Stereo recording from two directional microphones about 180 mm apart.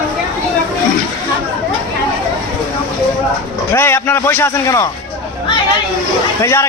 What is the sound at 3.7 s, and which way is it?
A man's voice, 15° left (ahead or behind).